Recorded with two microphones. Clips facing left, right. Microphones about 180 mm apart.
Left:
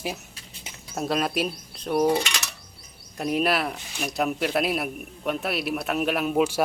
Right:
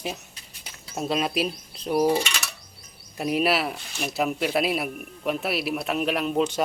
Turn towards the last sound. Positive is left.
turn(degrees=10)  # may be behind; listen again after turning